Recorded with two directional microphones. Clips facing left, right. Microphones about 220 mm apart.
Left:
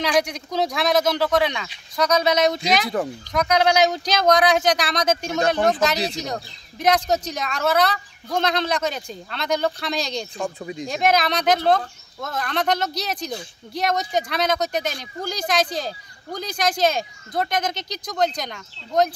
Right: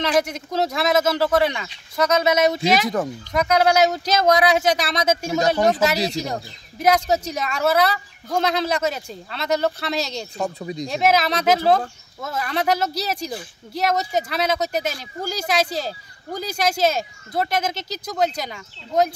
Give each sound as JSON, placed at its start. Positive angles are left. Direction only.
{"t": 0.0, "sound": "speech", "side_deg": -5}
{"t": 10.3, "sound": "speech", "side_deg": -40}
{"t": 10.9, "sound": "speech", "side_deg": -5}